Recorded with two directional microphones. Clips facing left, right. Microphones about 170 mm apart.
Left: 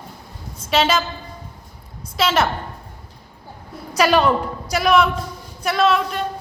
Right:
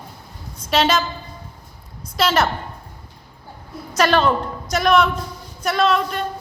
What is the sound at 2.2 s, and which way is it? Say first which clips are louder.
Speech: even; 5° left (ahead or behind).